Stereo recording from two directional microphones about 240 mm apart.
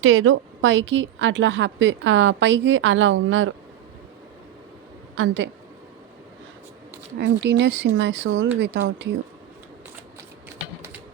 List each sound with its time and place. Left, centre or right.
0.0 s a woman's voice: right
5.1 s a woman's voice: right
7.2 s a woman's voice: right